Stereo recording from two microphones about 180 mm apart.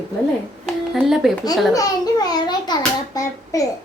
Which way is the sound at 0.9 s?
Centre (ahead or behind).